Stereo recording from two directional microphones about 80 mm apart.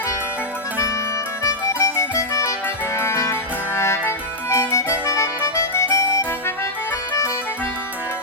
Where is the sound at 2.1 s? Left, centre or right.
Left.